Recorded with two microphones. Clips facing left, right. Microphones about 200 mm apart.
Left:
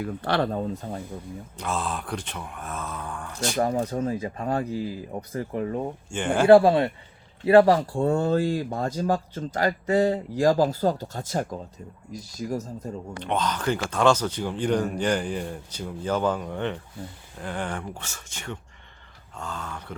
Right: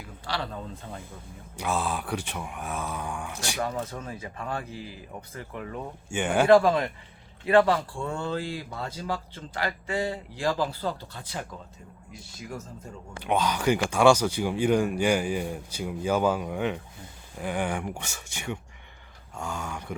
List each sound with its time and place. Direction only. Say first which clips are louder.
0.0 s speech: left 9 dB; 55° left (ahead or behind); by 1.0 s 40° left (ahead or behind)
1.5 s a man's voice: right 1 dB; 5° right (ahead or behind)
3.6 s speech: left 8 dB; 35° left (ahead or behind)
6.1 s a man's voice: even; 5° right (ahead or behind)
6.5 s speech: left 5 dB; 30° left (ahead or behind)
13.1 s a man's voice: right 2 dB; 10° right (ahead or behind)